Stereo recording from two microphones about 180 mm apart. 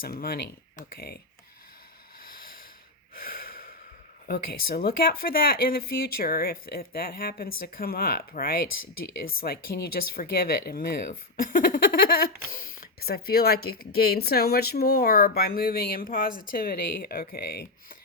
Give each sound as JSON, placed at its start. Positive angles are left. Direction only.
{"t": 0.0, "sound": "speech", "side_deg": 55}
{"t": 2.2, "sound": "a sound", "side_deg": 50}
{"t": 3.2, "sound": "breathing", "side_deg": 55}
{"t": 4.3, "sound": "speech", "side_deg": 55}